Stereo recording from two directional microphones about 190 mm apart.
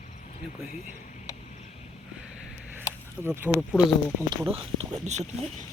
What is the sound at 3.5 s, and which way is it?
Speech, 5° right (ahead or behind).